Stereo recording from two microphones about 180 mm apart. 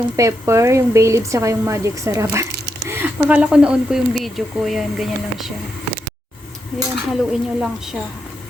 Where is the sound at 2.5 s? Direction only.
65° right (ahead or behind).